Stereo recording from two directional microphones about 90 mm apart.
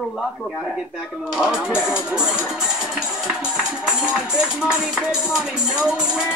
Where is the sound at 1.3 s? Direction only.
5° right (ahead or behind).